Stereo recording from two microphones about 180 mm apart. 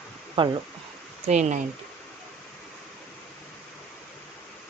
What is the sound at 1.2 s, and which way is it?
Speech, 40° right (ahead or behind).